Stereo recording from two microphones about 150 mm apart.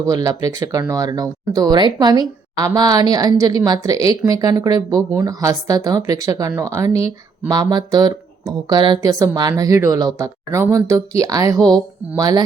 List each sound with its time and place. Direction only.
0.1 s speech: 25° right (ahead or behind)